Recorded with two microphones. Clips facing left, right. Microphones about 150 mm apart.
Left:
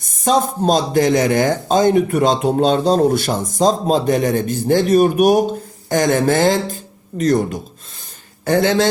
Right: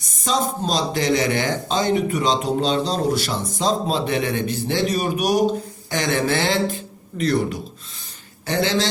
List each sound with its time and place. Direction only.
0.0 s speech: 50° left (ahead or behind)